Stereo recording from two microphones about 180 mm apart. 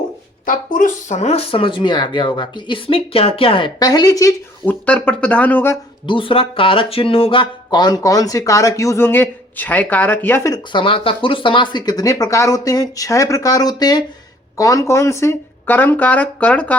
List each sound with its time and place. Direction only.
0.4 s speech: 50° left (ahead or behind); by 5.7 s 10° left (ahead or behind)
6.1 s speech: 30° left (ahead or behind); by 16.7 s 5° left (ahead or behind)